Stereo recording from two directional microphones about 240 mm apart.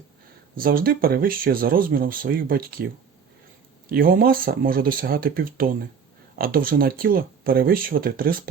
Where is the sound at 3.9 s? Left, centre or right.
Right.